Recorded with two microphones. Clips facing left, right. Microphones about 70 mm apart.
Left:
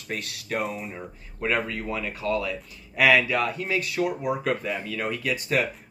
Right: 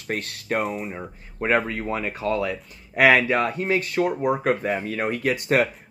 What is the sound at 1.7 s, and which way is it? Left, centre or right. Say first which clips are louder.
Speech: right 3 dB; right.